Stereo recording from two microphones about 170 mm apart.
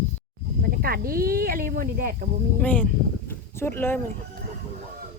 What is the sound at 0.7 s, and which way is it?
Cricket, 60° right (ahead or behind).